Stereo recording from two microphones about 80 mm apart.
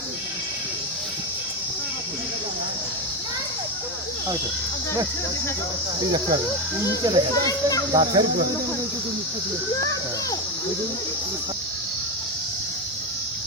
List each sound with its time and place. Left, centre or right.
6.0 s a child's voice: right